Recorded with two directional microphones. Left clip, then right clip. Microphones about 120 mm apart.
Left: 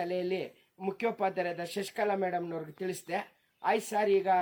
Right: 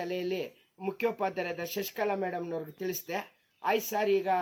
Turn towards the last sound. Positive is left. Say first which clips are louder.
# left 1 dB
turn(degrees=35)  # may be behind; listen again after turning